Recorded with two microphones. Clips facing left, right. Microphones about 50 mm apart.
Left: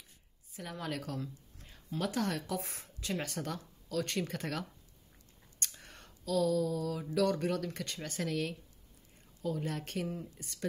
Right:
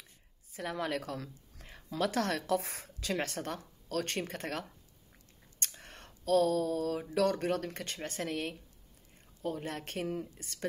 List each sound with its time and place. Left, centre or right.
0.5 s speech: right
2.0 s speech: right
3.2 s speech: right
5.6 s a sound: right
9.4 s speech: right